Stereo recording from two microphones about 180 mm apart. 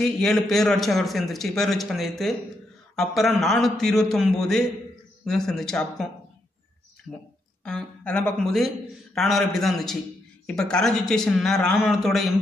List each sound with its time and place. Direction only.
0.0 s a man's voice: 5° left (ahead or behind)
7.1 s a man's voice: 5° left (ahead or behind)